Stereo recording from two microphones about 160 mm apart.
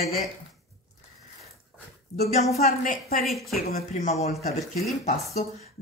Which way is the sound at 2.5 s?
65° left (ahead or behind).